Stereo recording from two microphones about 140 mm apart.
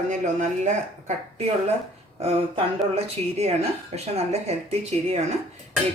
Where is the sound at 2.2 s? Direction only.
45° right (ahead or behind).